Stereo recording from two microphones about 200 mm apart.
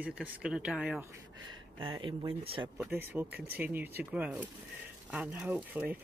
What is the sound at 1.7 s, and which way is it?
Speech, 25° right (ahead or behind).